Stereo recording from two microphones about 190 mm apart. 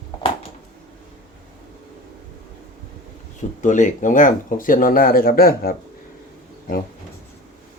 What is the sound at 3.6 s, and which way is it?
Speech, 40° left (ahead or behind).